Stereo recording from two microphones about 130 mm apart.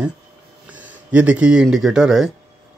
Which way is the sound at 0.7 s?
10° right (ahead or behind).